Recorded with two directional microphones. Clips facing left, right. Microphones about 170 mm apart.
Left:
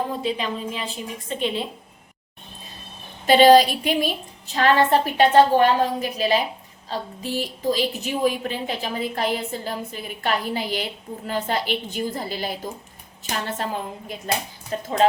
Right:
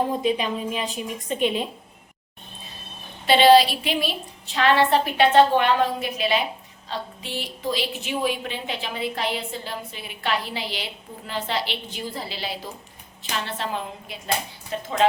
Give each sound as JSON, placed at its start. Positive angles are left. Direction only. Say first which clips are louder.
{"t": 0.2, "sound": "a woman's voice", "louder": "right 2 dB", "side_deg": -15}
{"t": 3.2, "sound": "a woman's voice", "louder": "left 2 dB", "side_deg": 45}
{"t": 14.7, "sound": "a woman's voice", "louder": "left 2 dB", "side_deg": 40}